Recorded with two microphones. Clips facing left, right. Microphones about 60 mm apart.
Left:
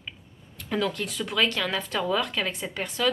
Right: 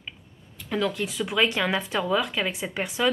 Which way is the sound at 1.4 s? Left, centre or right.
Centre.